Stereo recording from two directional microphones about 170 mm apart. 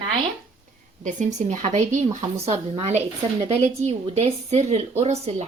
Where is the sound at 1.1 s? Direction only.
45° right (ahead or behind).